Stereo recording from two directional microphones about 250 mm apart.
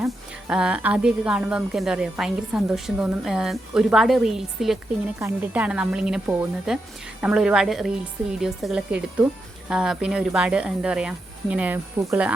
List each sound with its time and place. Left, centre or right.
0.0 s a woman's voice: centre